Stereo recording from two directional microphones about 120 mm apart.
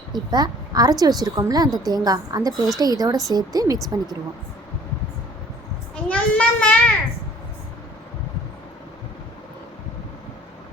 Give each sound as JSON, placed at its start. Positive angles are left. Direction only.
{"t": 0.1, "sound": "a woman's voice", "side_deg": -35}
{"t": 6.1, "sound": "a child's voice", "side_deg": 10}